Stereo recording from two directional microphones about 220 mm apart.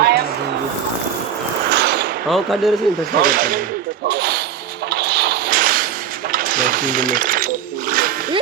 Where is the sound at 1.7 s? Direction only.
50° right (ahead or behind).